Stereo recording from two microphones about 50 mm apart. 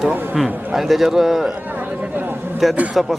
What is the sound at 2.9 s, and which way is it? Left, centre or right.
Music, centre.